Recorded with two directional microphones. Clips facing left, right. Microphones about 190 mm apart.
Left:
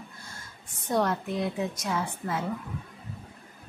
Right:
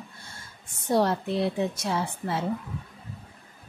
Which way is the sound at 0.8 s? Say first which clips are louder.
Right 3 dB; 30° right (ahead or behind).